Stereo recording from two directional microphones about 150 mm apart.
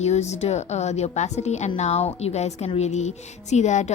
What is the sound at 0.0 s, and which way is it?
A woman's voice, 45° left (ahead or behind).